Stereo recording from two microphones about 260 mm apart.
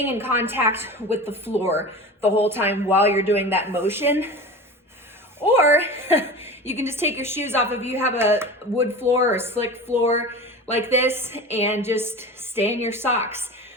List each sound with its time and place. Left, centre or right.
0.0 s a woman's voice: centre
5.4 s a woman's voice: centre
11.4 s a woman's voice: left
11.7 s a woman's voice: centre